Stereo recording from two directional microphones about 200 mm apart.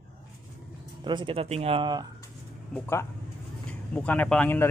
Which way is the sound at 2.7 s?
10° left (ahead or behind).